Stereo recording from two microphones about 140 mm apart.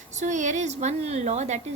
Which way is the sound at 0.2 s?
60° right (ahead or behind).